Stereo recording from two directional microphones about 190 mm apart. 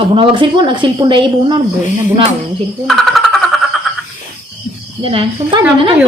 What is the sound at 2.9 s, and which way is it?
Vehicle, centre (ahead or behind).